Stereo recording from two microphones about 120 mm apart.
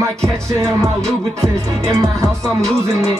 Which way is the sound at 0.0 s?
25° right (ahead or behind).